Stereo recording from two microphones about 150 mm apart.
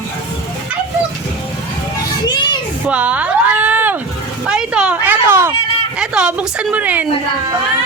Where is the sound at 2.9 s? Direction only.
10° right (ahead or behind).